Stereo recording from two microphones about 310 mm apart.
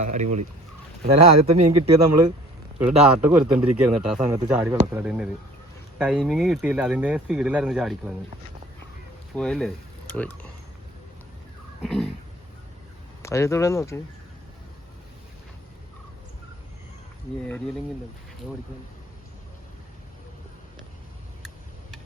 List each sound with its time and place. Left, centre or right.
0.0 s speech: right
1.3 s speech: right
2.7 s speech: centre
9.3 s speech: centre
11.8 s a sound: centre
13.2 s speech: centre